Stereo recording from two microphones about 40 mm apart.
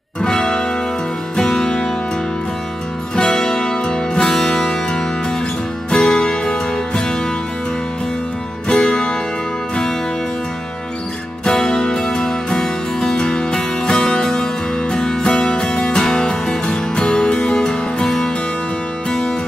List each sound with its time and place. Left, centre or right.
0.2 s music: centre
3.2 s music: centre
8.6 s music: left
11.4 s music: centre